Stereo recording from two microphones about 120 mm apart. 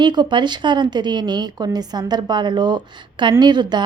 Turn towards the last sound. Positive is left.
turn(degrees=-40)  # may be behind; listen again after turning